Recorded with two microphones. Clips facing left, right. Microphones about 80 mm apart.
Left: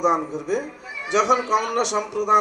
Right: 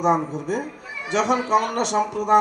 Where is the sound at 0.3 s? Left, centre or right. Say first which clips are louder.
Even; right.